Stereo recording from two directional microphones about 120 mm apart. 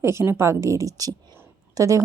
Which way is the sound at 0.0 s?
20° right (ahead or behind).